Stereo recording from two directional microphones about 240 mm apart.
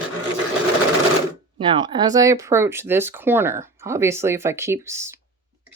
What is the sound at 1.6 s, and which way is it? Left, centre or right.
Speech, centre.